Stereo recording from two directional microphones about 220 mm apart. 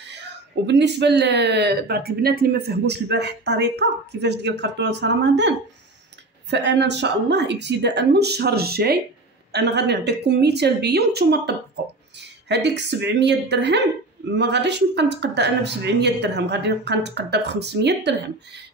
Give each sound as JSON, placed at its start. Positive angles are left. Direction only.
{"t": 0.7, "sound": "speech", "side_deg": -50}
{"t": 6.5, "sound": "speech", "side_deg": -50}